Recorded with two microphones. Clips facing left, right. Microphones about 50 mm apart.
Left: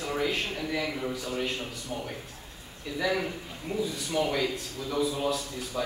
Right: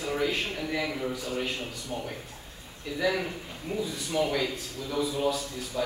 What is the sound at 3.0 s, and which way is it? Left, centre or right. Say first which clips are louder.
Speech: right 1 dB; centre.